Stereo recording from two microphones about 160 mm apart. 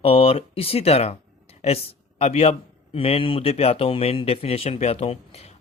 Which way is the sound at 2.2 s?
40° left (ahead or behind).